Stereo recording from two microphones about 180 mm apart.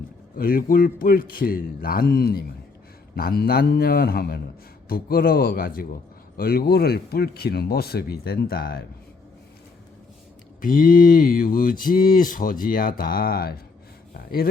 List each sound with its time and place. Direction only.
0.3 s a man's voice: 55° left (ahead or behind)
10.6 s speech: 50° left (ahead or behind)
14.1 s gasp: 55° left (ahead or behind)